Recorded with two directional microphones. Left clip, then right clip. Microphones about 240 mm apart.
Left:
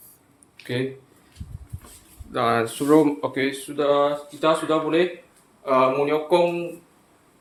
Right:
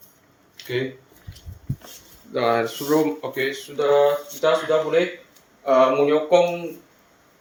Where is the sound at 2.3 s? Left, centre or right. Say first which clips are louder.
Right 1 dB; left.